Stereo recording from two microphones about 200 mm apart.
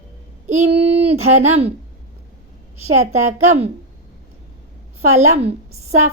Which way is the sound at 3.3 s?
90° right.